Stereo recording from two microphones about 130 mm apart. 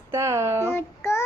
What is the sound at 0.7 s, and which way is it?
Child singing, 20° left (ahead or behind).